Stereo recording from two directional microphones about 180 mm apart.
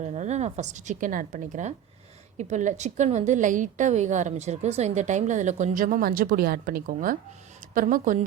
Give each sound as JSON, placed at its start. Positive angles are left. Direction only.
{"t": 0.0, "sound": "a woman's voice", "side_deg": -40}